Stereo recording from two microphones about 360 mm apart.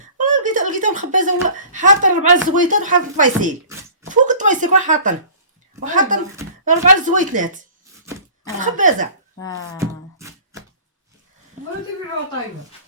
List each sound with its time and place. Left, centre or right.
0.2 s speech: right
9.7 s beatboxing: centre